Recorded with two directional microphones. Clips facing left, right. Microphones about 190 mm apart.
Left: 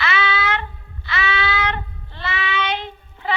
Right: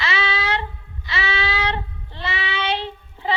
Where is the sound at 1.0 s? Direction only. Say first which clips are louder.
Left 2 dB; 30° right (ahead or behind).